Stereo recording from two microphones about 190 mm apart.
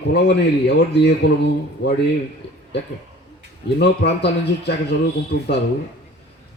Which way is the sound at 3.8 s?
60° left (ahead or behind).